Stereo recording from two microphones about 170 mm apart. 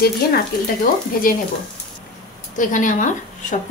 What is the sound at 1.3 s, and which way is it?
Speech, 55° left (ahead or behind).